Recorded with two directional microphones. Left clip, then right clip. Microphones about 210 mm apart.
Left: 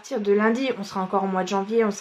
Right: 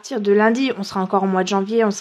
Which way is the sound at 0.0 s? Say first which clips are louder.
Right 5 dB; 55° right (ahead or behind).